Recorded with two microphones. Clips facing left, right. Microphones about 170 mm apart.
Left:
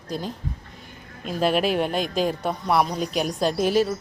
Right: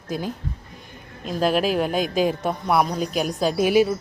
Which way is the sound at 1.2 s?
Centre (ahead or behind).